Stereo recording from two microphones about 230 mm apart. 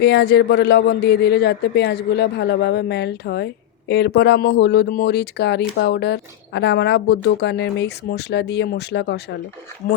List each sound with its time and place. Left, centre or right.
0.0 s speech: left